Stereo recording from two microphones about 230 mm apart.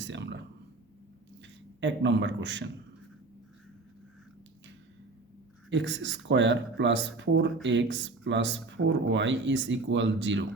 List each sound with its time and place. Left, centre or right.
0.0 s speech: right
1.8 s speech: right
5.7 s speech: right